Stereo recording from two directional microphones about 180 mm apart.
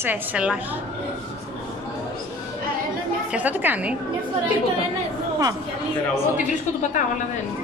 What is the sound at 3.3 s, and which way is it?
Speech, 10° right (ahead or behind).